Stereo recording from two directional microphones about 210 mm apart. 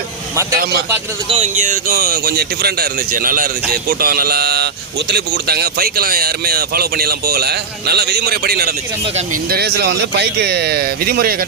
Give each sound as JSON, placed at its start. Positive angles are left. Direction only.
{"t": 0.5, "sound": "speech", "side_deg": -45}
{"t": 1.3, "sound": "speech", "side_deg": -30}